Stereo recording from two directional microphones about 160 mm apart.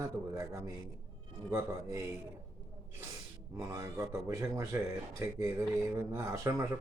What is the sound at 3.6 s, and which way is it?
A man's voice, 20° right (ahead or behind).